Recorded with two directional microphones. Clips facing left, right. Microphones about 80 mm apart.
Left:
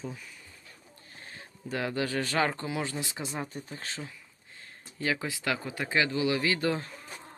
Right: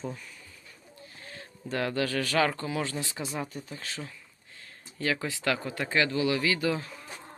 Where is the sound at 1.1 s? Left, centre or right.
Left.